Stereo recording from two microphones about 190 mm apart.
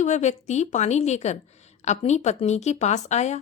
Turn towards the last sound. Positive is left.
turn(degrees=35)  # may be behind; listen again after turning